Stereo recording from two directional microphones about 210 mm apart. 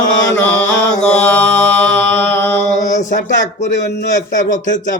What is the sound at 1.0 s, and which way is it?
Mantra, 5° left (ahead or behind).